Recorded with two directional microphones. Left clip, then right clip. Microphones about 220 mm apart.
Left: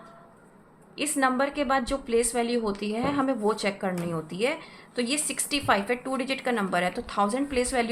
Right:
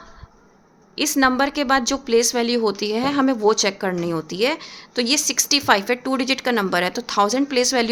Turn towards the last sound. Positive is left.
turn(degrees=-50)  # may be behind; listen again after turning